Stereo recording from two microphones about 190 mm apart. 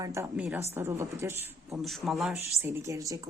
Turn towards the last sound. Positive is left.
turn(degrees=-15)  # may be behind; listen again after turning